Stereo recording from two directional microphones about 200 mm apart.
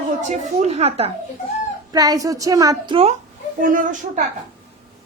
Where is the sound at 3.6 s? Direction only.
40° right (ahead or behind).